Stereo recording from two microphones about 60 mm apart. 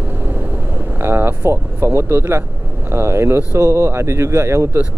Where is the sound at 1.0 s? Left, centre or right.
Right.